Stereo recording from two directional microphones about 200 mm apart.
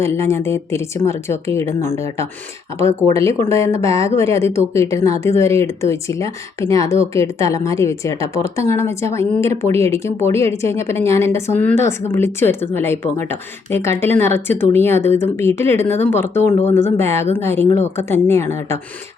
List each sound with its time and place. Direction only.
0.0 s speech: 15° left (ahead or behind)
3.5 s speech: 15° left (ahead or behind)